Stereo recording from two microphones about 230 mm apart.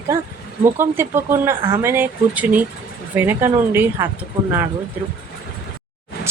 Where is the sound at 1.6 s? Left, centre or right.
Right.